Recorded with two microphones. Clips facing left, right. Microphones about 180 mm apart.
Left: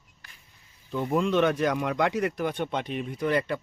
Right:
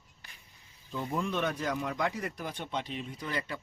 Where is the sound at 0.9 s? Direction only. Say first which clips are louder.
Left 8 dB; 70° left (ahead or behind).